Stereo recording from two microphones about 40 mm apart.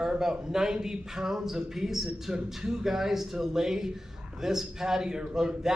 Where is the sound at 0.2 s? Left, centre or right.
Centre.